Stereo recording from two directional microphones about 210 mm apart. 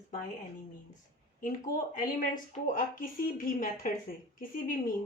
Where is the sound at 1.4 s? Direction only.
40° left (ahead or behind).